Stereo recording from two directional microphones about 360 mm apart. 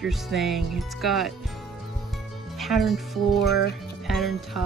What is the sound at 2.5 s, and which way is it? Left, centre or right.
Speech, centre.